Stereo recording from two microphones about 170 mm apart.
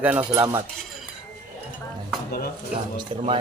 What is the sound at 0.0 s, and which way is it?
Cutlery, 10° right (ahead or behind).